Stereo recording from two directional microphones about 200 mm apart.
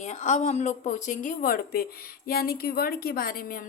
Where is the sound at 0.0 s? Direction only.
35° left (ahead or behind).